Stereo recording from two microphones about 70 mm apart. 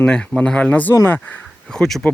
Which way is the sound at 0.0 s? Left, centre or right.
Centre.